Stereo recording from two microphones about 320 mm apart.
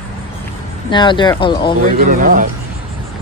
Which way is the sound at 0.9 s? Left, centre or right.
Centre.